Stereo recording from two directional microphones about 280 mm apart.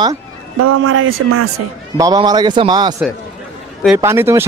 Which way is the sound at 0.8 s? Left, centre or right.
Right.